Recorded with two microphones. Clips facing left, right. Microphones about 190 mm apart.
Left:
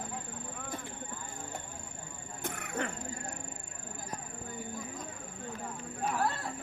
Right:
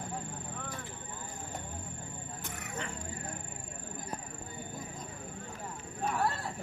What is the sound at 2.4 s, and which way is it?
Wild animals, 55° left (ahead or behind).